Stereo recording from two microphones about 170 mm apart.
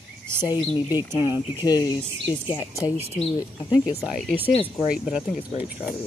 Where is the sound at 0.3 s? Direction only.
15° right (ahead or behind).